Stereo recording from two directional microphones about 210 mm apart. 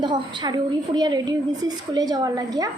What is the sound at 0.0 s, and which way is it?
A woman's voice, 20° right (ahead or behind).